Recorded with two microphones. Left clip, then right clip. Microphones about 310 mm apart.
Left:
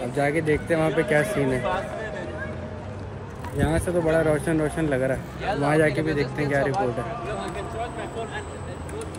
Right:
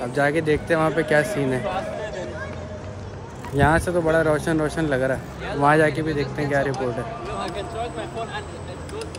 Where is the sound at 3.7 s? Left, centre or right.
Centre.